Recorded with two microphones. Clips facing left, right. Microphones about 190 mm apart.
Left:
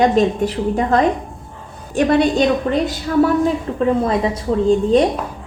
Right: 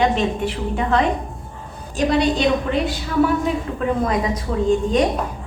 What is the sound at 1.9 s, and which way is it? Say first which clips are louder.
A woman's voice: left 4 dB; 55° left (ahead or behind).